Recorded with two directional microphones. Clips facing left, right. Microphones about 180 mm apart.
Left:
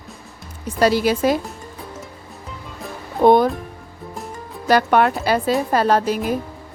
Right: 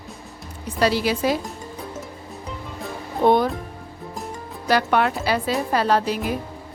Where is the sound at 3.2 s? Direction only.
45° left (ahead or behind).